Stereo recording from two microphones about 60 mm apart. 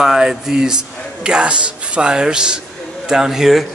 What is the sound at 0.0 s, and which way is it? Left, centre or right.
Speech, centre.